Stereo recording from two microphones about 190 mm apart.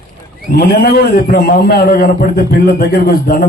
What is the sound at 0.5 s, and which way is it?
A man's voice, 50° left (ahead or behind).